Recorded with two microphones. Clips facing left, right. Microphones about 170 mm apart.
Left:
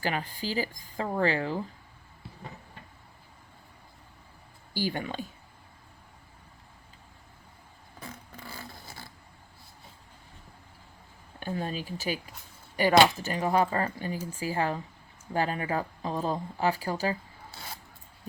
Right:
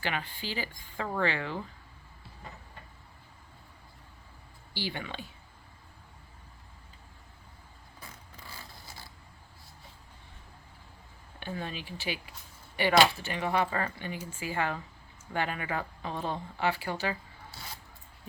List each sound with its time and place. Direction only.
0.0 s speech: 40° left (ahead or behind)
4.7 s speech: 45° left (ahead or behind)
11.3 s speech: 40° left (ahead or behind)